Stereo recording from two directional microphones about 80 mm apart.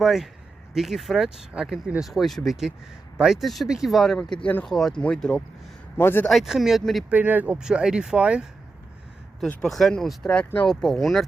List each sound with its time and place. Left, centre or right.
0.0 s speech: centre
6.0 s a man's voice: left
6.2 s speech: centre
7.1 s speech: right
9.4 s speech: centre